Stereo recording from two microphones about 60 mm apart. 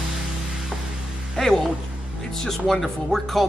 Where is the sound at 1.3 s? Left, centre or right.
Centre.